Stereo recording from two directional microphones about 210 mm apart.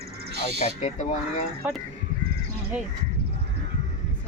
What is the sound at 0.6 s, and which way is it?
Speech, 30° left (ahead or behind).